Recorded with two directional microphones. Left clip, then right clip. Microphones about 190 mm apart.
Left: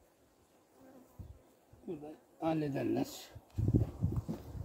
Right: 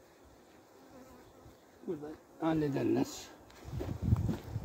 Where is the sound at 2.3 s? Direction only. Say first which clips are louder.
Right 2 dB; centre (ahead or behind).